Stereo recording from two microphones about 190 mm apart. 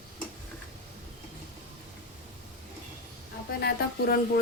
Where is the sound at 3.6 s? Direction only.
55° left (ahead or behind).